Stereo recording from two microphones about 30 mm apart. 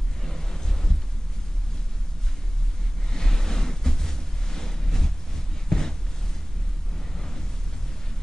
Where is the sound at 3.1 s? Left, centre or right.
Centre.